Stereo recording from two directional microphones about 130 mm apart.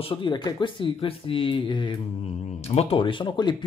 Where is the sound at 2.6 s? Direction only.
50° left (ahead or behind); by 3.5 s 35° left (ahead or behind).